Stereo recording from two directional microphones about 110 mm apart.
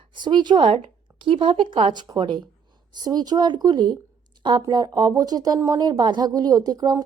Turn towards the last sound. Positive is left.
turn(degrees=-35)  # may be behind; listen again after turning